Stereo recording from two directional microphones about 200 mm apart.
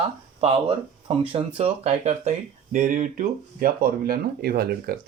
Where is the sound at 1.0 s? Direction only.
25° right (ahead or behind).